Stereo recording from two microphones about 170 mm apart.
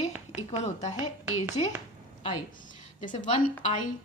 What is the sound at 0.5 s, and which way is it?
Speech, 40° left (ahead or behind).